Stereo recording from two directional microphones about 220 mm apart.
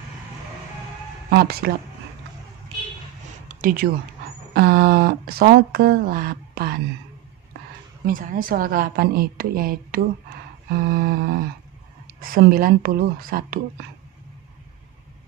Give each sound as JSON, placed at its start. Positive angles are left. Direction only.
{"t": 1.3, "sound": "speech", "side_deg": -45}
{"t": 3.4, "sound": "a sound", "side_deg": -40}
{"t": 4.6, "sound": "speech", "side_deg": -45}
{"t": 8.1, "sound": "speech", "side_deg": -40}